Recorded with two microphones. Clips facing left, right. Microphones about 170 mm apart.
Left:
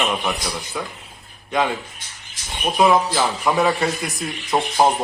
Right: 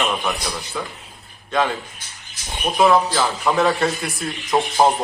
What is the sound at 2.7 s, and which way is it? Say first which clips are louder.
Speech: right 1 dB; 15° left (ahead or behind).